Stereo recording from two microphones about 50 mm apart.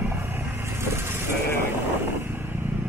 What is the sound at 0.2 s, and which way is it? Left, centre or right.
Vehicle, right.